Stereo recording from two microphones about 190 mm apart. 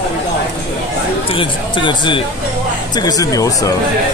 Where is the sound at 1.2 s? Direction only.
25° left (ahead or behind).